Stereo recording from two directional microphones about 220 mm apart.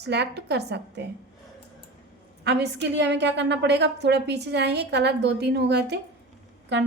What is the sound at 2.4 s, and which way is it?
A woman's voice, 50° right (ahead or behind).